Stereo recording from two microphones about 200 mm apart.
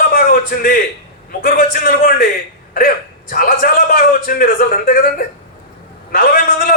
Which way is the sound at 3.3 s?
45° left (ahead or behind).